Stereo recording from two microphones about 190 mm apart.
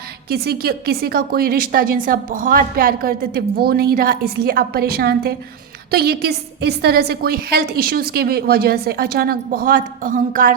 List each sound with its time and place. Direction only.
0.3 s a woman's voice: 55° right (ahead or behind)